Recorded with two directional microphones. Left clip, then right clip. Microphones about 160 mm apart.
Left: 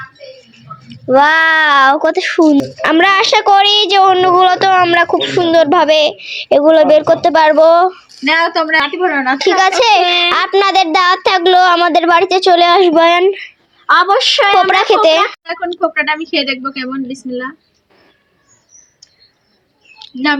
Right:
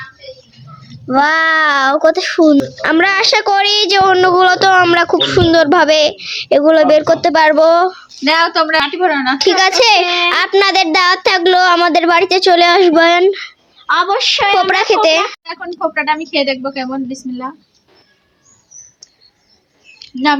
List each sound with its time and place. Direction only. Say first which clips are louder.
0.9 s speech: left 3 dB; 10° left (ahead or behind)
2.8 s a woman's voice: left 3 dB; 5° left (ahead or behind); by 13.4 s 10° right (ahead or behind)
13.9 s a woman's voice: left 3 dB; 45° left (ahead or behind)
14.6 s speech: left 2 dB; centre (ahead or behind)
15.9 s a woman's voice: left 1 dB; 10° right (ahead or behind)